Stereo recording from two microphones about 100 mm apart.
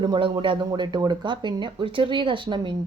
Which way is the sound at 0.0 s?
55° right (ahead or behind).